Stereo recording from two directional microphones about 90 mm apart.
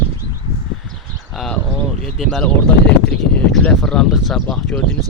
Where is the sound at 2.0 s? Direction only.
Centre (ahead or behind).